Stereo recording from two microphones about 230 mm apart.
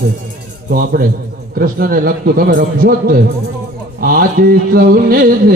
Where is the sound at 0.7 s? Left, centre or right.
Right.